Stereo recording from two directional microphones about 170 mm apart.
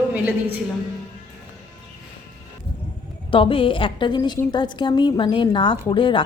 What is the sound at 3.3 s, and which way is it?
A woman's voice, 30° left (ahead or behind).